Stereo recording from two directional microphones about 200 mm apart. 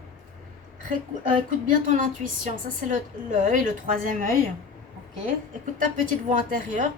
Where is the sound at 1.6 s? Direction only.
40° right (ahead or behind).